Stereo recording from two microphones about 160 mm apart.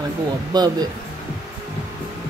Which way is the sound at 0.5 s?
25° right (ahead or behind).